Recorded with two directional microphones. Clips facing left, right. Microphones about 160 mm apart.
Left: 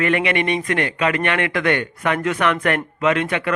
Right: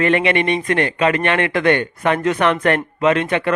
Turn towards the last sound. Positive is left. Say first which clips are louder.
# right 3 dB
turn(degrees=-30)  # may be behind; listen again after turning